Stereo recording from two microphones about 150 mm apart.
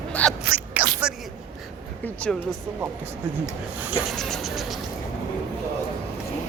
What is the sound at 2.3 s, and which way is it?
Speech, 5° left (ahead or behind).